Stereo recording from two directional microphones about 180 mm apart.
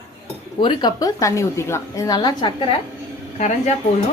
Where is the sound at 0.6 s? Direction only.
25° left (ahead or behind).